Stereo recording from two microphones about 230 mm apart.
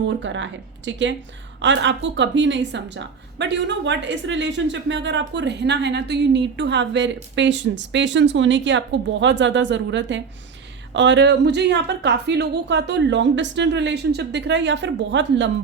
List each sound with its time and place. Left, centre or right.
0.1 s a woman's voice: right